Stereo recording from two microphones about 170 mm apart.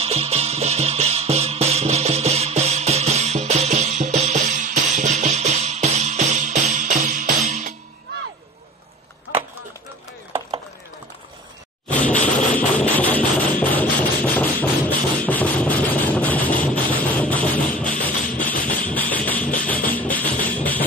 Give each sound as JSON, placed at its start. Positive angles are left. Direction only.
{"t": 0.0, "sound": "music", "side_deg": -35}
{"t": 11.9, "sound": "music", "side_deg": 10}